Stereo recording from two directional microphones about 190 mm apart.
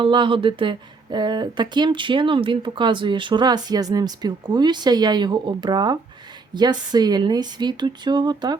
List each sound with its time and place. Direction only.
0.0 s speech: 25° right (ahead or behind)